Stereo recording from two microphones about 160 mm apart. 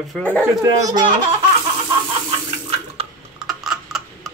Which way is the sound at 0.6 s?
25° right (ahead or behind).